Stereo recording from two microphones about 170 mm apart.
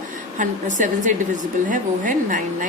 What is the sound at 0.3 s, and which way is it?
A woman's voice, 50° right (ahead or behind).